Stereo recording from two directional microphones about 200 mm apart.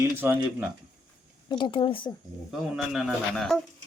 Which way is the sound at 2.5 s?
Centre (ahead or behind).